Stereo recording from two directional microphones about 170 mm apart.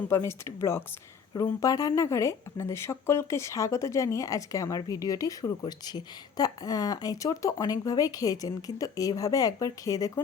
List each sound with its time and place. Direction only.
0.1 s speech: 15° left (ahead or behind)